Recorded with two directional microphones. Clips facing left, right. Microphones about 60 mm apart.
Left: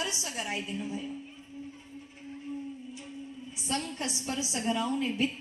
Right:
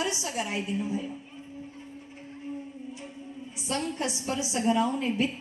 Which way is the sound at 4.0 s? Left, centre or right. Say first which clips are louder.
Right 4 dB; right.